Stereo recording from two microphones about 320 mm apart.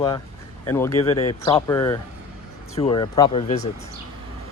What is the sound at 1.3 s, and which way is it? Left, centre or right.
Speech, centre.